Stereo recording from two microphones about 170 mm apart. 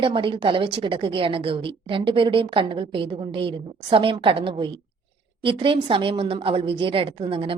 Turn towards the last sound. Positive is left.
turn(degrees=-30)  # may be behind; listen again after turning